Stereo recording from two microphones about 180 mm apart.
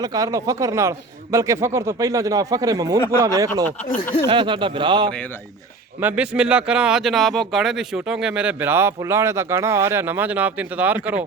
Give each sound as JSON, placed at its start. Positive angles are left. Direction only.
{"t": 0.0, "sound": "speech", "side_deg": -20}
{"t": 6.0, "sound": "speech", "side_deg": -10}